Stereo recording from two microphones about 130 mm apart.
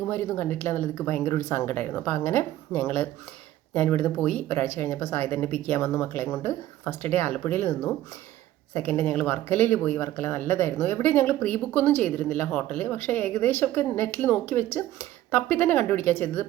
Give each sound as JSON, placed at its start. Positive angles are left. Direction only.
{"t": 0.1, "sound": "speech", "side_deg": 15}